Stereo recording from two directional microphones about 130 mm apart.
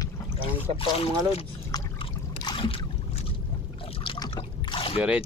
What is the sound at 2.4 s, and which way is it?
Boat, 45° left (ahead or behind).